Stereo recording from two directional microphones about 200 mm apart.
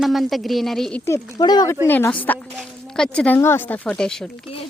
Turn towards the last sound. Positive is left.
turn(degrees=5)  # may be behind; listen again after turning